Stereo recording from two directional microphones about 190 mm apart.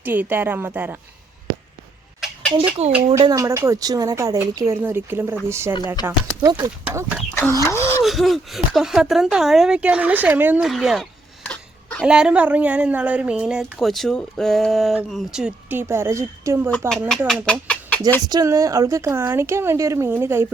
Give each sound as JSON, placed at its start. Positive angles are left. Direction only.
{"t": 0.0, "sound": "a woman's voice", "side_deg": -10}
{"t": 2.8, "sound": "speech", "side_deg": -35}
{"t": 3.2, "sound": "a woman's voice", "side_deg": -20}
{"t": 6.8, "sound": "a woman's voice", "side_deg": -10}
{"t": 7.6, "sound": "speech", "side_deg": 15}
{"t": 8.0, "sound": "speech", "side_deg": 0}
{"t": 12.0, "sound": "speech", "side_deg": -5}
{"t": 17.1, "sound": "speech", "side_deg": 0}
{"t": 18.3, "sound": "a woman's voice", "side_deg": -20}